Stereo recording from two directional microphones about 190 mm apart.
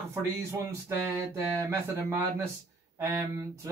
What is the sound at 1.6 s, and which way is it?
Speech, 15° right (ahead or behind).